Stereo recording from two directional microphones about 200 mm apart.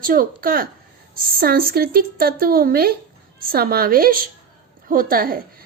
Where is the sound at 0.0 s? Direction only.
45° right (ahead or behind).